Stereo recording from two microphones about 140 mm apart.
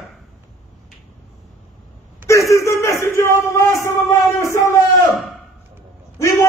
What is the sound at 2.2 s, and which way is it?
Speech, 20° left (ahead or behind).